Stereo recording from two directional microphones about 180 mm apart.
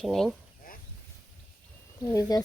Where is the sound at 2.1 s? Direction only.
20° left (ahead or behind).